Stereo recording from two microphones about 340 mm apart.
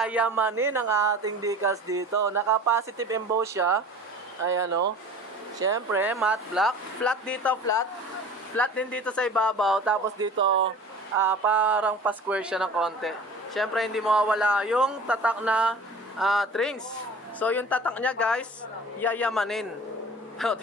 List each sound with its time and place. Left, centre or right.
0.0 s speech: centre
4.6 s speech: right
5.6 s speech: centre
10.3 s speech: right
11.1 s speech: centre